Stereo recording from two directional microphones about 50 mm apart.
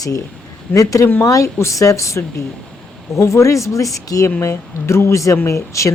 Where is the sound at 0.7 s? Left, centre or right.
Left.